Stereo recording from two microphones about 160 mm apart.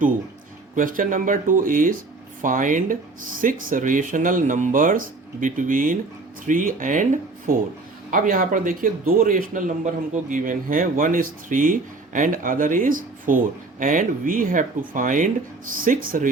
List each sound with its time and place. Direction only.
0.8 s speech: 60° right (ahead or behind)